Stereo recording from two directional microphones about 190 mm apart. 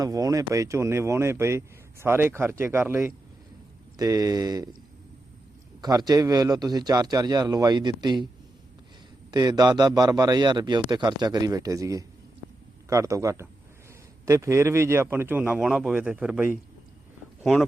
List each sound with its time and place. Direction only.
0.0 s a man's voice: 20° right (ahead or behind)
5.8 s a man's voice: 20° right (ahead or behind)
9.3 s a man's voice: 20° right (ahead or behind); by 17.7 s centre (ahead or behind)